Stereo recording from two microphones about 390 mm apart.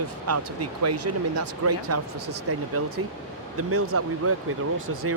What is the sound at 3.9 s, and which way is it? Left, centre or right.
Speech, right.